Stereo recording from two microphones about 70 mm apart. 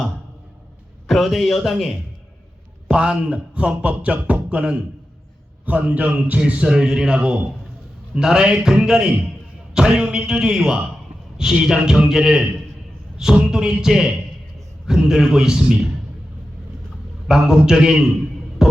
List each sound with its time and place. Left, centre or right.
1.0 s a man's voice: centre
2.9 s speech: centre
5.6 s a sound: right
6.7 s speech: centre
17.2 s speech: centre
18.6 s music: centre